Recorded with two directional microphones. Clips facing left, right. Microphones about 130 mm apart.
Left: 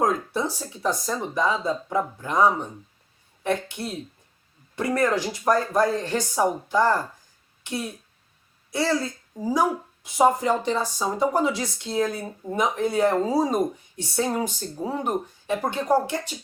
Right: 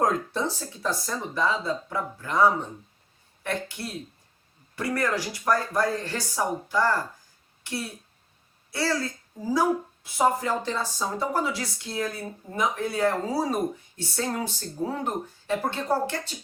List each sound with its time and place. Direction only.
0.0 s a woman's voice: 10° left (ahead or behind)